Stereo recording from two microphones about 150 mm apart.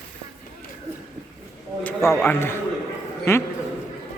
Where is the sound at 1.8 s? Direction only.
15° left (ahead or behind).